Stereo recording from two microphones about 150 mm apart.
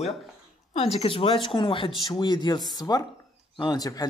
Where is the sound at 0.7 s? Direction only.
45° left (ahead or behind).